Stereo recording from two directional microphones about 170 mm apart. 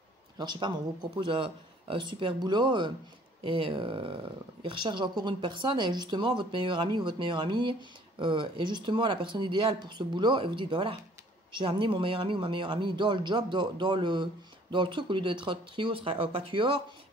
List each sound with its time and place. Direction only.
0.4 s speech: 25° right (ahead or behind)